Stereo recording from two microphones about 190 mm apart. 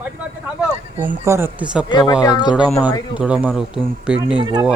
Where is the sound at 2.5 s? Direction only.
5° right (ahead or behind).